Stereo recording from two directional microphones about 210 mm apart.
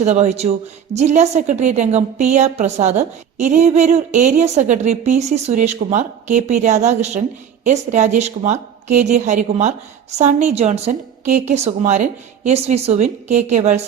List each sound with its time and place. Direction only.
0.0 s a woman's voice: 30° right (ahead or behind)